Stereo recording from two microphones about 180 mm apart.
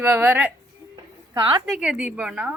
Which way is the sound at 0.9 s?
25° right (ahead or behind).